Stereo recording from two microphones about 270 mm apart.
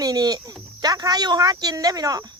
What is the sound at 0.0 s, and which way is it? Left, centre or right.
Speech, centre.